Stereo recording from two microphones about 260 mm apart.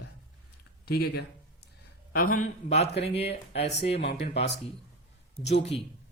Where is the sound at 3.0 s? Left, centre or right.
Left.